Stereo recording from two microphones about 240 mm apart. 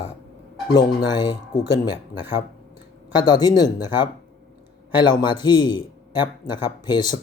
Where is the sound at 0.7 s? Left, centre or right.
Centre.